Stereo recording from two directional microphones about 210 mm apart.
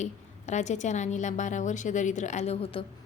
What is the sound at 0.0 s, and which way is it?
A woman's voice, 35° left (ahead or behind).